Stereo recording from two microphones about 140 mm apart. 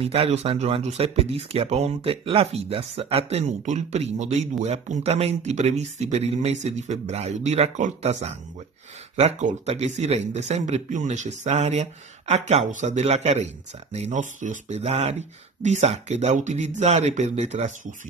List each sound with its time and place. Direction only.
0.0 s speech: 45° right (ahead or behind)